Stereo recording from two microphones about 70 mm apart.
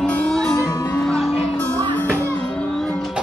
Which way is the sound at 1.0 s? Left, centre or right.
Centre.